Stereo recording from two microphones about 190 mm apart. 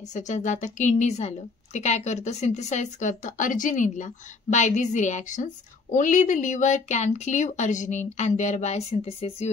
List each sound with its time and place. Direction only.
0.1 s a woman's voice: 40° left (ahead or behind)